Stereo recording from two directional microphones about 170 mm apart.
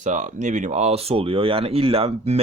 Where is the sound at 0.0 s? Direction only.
45° right (ahead or behind).